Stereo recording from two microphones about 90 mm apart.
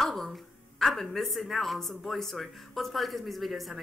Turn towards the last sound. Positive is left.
turn(degrees=0)  # may be behind; listen again after turning